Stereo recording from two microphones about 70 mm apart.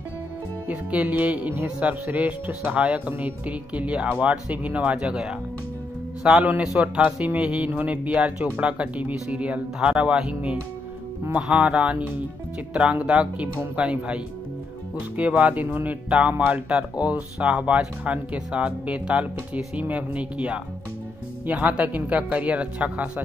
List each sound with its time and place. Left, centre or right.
0.7 s speech: right
8.1 s speech: centre